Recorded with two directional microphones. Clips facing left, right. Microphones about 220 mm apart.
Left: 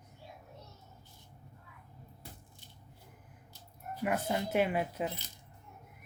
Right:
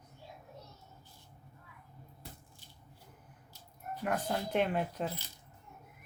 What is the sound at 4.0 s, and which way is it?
Speech, 10° left (ahead or behind).